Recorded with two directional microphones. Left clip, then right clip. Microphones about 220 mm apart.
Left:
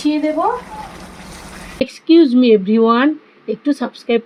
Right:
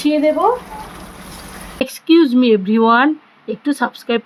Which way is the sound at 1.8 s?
20° right (ahead or behind).